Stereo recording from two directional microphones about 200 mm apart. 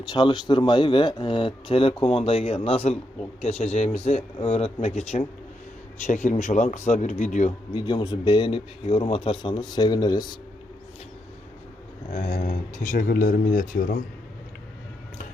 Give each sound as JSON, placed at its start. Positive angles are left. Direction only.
{"t": 0.0, "sound": "a man's voice", "side_deg": 20}
{"t": 7.7, "sound": "a man's voice", "side_deg": 25}
{"t": 12.1, "sound": "speech", "side_deg": 40}